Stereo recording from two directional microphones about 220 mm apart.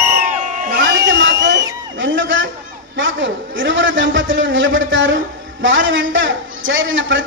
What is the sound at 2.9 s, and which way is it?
A man's voice, 60° right (ahead or behind).